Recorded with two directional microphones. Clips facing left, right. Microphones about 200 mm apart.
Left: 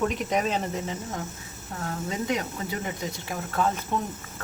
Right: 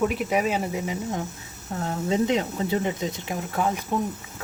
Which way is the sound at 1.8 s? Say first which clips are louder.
Right 7 dB; 25° right (ahead or behind).